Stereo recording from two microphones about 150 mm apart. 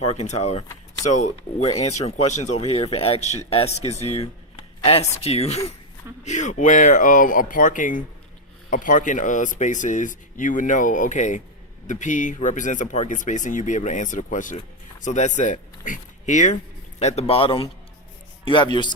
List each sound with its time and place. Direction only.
0.1 s a man's voice: 45° left (ahead or behind); by 18.9 s 30° left (ahead or behind)